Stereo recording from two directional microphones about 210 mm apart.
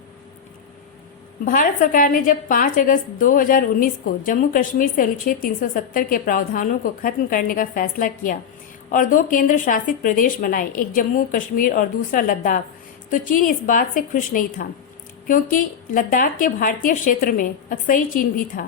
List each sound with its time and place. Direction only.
1.5 s a woman's voice: 40° left (ahead or behind)